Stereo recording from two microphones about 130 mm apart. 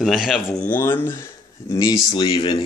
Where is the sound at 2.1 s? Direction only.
35° left (ahead or behind).